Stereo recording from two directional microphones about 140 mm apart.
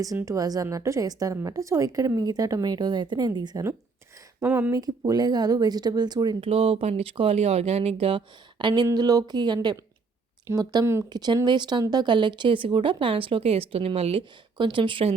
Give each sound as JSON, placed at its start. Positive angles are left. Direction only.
{"t": 0.2, "sound": "a woman's voice", "side_deg": -25}
{"t": 4.7, "sound": "a woman's voice", "side_deg": -25}
{"t": 6.4, "sound": "a woman's voice", "side_deg": -45}